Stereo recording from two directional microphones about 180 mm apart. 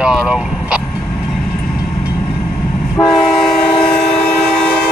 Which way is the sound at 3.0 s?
25° left (ahead or behind).